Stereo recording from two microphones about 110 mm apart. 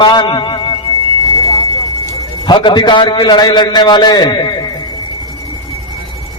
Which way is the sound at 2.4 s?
45° left (ahead or behind).